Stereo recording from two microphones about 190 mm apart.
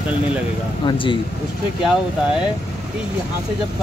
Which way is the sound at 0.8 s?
25° left (ahead or behind).